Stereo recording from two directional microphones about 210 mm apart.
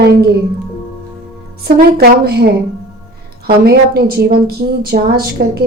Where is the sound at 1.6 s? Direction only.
50° right (ahead or behind).